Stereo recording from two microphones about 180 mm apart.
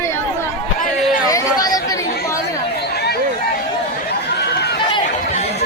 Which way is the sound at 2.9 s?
65° left (ahead or behind).